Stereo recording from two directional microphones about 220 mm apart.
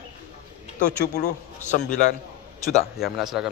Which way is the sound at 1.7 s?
35° left (ahead or behind).